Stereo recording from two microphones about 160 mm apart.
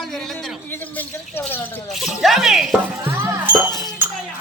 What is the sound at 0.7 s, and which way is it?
A man's voice, 10° left (ahead or behind).